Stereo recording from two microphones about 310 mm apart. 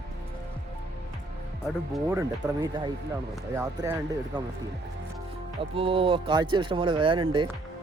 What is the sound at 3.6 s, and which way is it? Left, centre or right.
Speech, centre.